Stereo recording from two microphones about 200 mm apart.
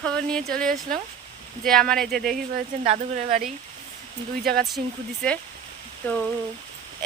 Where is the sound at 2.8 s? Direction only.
35° right (ahead or behind).